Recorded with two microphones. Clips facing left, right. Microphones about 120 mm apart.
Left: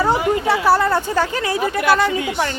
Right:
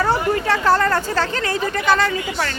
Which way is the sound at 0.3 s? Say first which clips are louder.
Left 1 dB; 15° left (ahead or behind).